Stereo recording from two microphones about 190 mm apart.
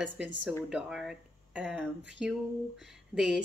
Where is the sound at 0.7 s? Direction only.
5° right (ahead or behind).